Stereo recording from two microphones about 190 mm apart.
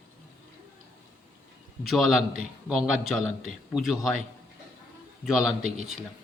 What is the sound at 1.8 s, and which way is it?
A man's voice, centre (ahead or behind).